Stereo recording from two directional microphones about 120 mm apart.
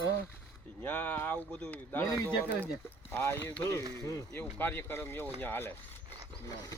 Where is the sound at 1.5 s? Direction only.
10° left (ahead or behind); by 4.4 s 30° left (ahead or behind).